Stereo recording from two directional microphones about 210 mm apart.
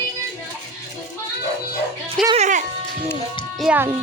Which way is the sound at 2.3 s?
35° right (ahead or behind).